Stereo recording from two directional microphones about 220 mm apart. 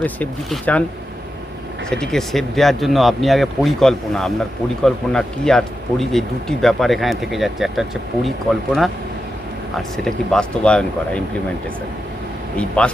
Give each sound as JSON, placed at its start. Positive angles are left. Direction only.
{"t": 0.0, "sound": "speech", "side_deg": 5}
{"t": 1.9, "sound": "speech", "side_deg": 0}
{"t": 12.5, "sound": "speech", "side_deg": 5}